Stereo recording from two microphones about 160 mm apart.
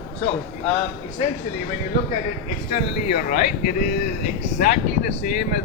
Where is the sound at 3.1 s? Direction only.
60° left (ahead or behind).